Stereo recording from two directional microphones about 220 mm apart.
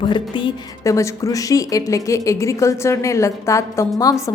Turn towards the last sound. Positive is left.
turn(degrees=15)  # may be behind; listen again after turning